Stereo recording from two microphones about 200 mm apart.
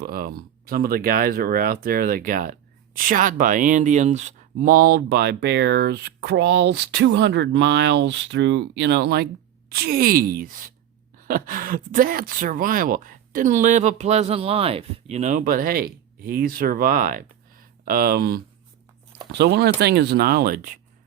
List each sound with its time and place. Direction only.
0.0 s speech: 45° right (ahead or behind)